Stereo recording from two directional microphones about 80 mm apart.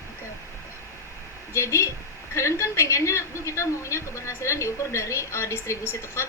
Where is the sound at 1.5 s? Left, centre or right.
Left.